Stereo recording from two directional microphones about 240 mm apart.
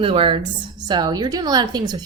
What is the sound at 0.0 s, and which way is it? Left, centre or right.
A woman's voice, right.